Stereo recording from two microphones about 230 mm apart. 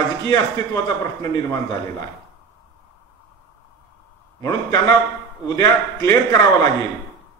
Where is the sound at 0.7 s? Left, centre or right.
Centre.